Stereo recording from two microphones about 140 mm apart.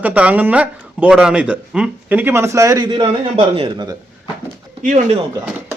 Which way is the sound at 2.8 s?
35° right (ahead or behind).